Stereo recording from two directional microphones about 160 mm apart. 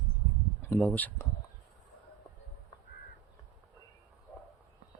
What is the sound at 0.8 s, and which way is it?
Speech, 10° left (ahead or behind).